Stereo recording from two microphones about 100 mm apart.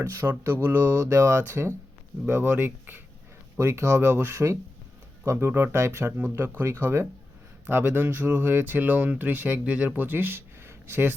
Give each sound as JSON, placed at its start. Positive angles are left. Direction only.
{"t": 0.0, "sound": "speech", "side_deg": -25}